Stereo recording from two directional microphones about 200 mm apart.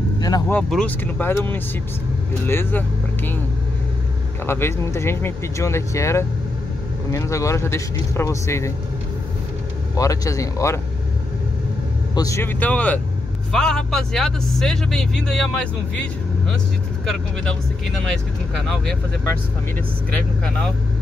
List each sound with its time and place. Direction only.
0.5 s speech: 5° left (ahead or behind)
4.5 s speech: 10° left (ahead or behind)
9.9 s speech: 15° left (ahead or behind)
12.2 s speech: 15° left (ahead or behind)